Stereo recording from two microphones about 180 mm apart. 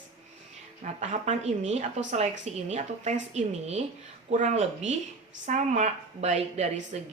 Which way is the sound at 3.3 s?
35° right (ahead or behind).